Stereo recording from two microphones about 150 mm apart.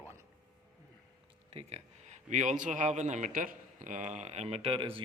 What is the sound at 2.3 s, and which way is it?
A man's voice, 55° right (ahead or behind).